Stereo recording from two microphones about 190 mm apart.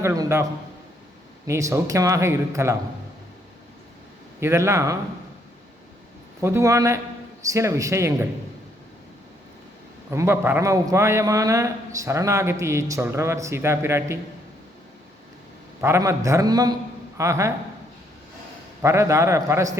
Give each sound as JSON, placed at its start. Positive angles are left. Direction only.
{"t": 0.0, "sound": "a man's voice", "side_deg": -15}
{"t": 1.5, "sound": "a man's voice", "side_deg": -15}
{"t": 4.4, "sound": "a man's voice", "side_deg": -15}
{"t": 6.4, "sound": "a man's voice", "side_deg": -15}
{"t": 10.1, "sound": "a man's voice", "side_deg": -15}
{"t": 15.8, "sound": "a man's voice", "side_deg": -15}
{"t": 18.8, "sound": "a man's voice", "side_deg": -15}